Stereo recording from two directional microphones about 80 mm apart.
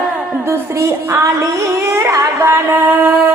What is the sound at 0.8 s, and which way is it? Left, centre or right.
Music, right.